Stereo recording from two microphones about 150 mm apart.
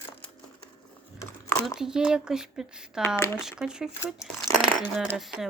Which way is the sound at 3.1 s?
15° left (ahead or behind).